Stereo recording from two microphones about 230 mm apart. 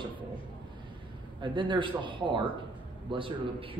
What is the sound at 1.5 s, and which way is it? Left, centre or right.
A man's voice, right.